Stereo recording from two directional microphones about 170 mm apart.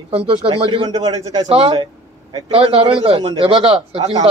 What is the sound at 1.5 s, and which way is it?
A man's voice, 30° right (ahead or behind).